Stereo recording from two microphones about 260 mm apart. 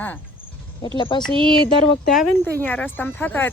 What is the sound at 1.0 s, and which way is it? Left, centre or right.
Speech, centre.